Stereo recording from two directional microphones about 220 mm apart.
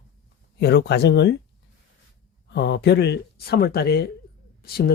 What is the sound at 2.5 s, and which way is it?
Speech, 50° left (ahead or behind).